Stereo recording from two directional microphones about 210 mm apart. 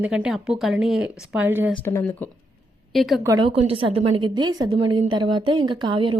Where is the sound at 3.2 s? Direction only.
20° right (ahead or behind).